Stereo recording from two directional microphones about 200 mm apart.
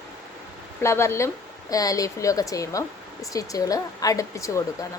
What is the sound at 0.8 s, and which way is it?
Speech, 15° left (ahead or behind).